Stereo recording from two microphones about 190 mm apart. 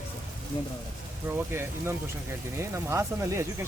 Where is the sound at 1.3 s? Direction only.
15° right (ahead or behind).